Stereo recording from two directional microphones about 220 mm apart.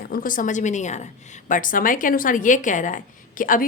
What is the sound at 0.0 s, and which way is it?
A woman's voice, 40° left (ahead or behind).